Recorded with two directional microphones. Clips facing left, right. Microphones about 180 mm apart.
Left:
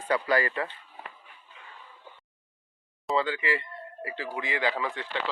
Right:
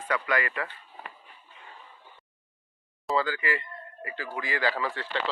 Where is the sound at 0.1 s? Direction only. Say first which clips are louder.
Left 3 dB; 30° left (ahead or behind).